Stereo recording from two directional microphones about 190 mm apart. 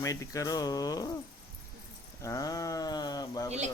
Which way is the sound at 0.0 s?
15° left (ahead or behind).